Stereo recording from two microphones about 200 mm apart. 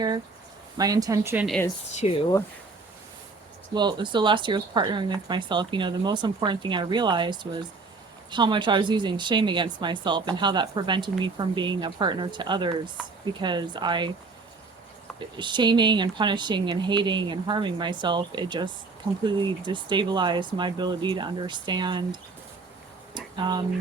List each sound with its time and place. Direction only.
0.8 s a woman's voice: 20° right (ahead or behind)
2.0 s speech: 30° left (ahead or behind)
3.8 s speech: 20° right (ahead or behind)
15.4 s speech: 25° right (ahead or behind)
23.1 s a sound: 20° right (ahead or behind)